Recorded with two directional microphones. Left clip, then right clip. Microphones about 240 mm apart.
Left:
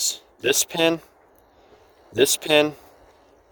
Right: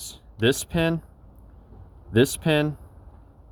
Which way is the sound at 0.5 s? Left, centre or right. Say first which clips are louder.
Left 5 dB; centre.